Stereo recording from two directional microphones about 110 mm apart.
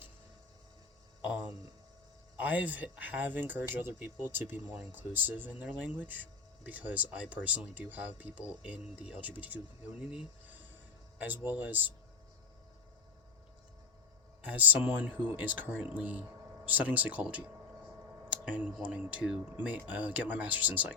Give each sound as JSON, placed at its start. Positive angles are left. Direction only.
{"t": 2.4, "sound": "speech", "side_deg": -15}
{"t": 11.2, "sound": "speech", "side_deg": -15}
{"t": 14.5, "sound": "speech", "side_deg": -15}